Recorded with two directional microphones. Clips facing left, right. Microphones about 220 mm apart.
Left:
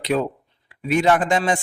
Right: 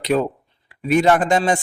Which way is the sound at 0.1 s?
40° right (ahead or behind).